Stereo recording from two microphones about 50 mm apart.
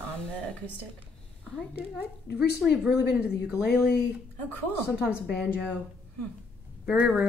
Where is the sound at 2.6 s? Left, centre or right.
Centre.